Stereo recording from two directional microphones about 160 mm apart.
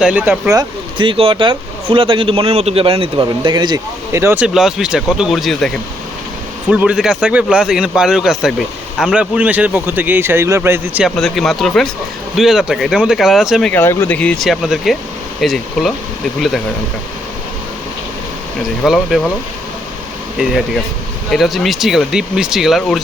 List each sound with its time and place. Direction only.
0.0 s speech: 10° right (ahead or behind)
0.5 s speech: 30° right (ahead or behind); by 11.0 s 15° right (ahead or behind)
11.0 s speech: centre (ahead or behind)
13.7 s speech: 15° left (ahead or behind)
18.8 s speech: centre (ahead or behind)
20.4 s speech: centre (ahead or behind)